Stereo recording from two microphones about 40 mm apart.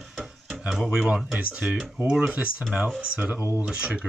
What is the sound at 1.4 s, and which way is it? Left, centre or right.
Speech, right.